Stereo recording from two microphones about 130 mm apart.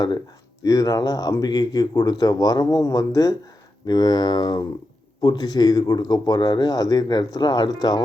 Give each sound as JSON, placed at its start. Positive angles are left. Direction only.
{"t": 0.6, "sound": "speech", "side_deg": 30}